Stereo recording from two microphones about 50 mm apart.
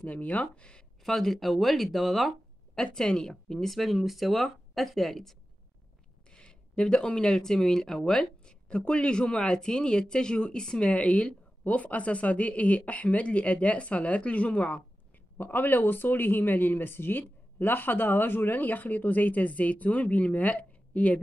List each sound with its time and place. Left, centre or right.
0.0 s speech: left
1.0 s speech: centre
2.8 s speech: centre
6.3 s speech: centre
15.3 s speech: left